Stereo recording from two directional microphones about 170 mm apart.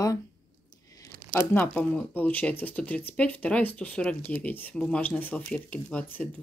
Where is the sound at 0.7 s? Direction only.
20° left (ahead or behind).